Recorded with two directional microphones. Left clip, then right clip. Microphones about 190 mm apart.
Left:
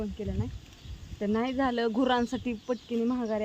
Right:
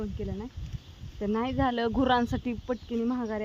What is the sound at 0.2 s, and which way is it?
Speech, 15° right (ahead or behind).